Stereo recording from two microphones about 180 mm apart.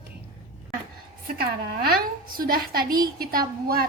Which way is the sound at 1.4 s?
60° right (ahead or behind).